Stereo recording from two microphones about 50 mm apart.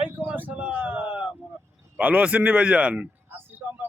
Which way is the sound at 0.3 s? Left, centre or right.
Right.